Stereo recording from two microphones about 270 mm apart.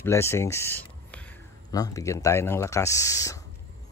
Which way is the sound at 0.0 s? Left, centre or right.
Centre.